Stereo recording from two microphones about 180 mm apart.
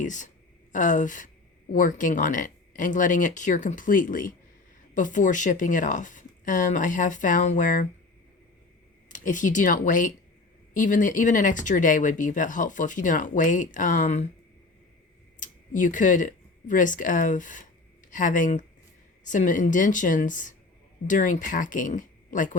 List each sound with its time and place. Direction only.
0.0 s speech: 45° left (ahead or behind)
9.0 s speech: 45° left (ahead or behind)
15.4 s speech: 45° left (ahead or behind)